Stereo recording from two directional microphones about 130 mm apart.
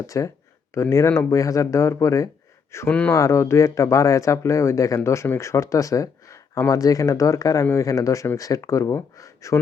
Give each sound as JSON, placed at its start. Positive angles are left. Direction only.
{"t": 0.1, "sound": "speech", "side_deg": 25}
{"t": 2.7, "sound": "speech", "side_deg": 15}